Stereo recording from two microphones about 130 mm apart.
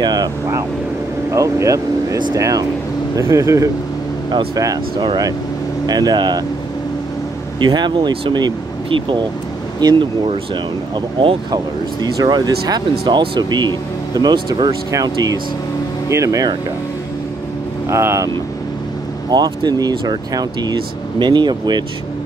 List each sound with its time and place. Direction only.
0.0 s vehicle: 30° right (ahead or behind)
1.3 s speech: 25° right (ahead or behind)
7.6 s speech: 35° right (ahead or behind)
17.8 s speech: 20° right (ahead or behind)
19.3 s speech: 35° right (ahead or behind)